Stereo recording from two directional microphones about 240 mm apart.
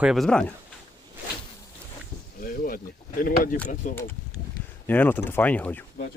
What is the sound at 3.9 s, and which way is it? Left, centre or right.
Speech, centre.